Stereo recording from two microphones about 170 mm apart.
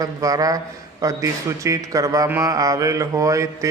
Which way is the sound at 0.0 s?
20° right (ahead or behind).